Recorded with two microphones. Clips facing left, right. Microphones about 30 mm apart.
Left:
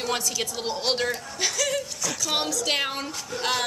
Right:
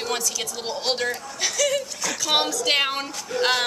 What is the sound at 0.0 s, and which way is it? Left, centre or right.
A woman's voice, centre.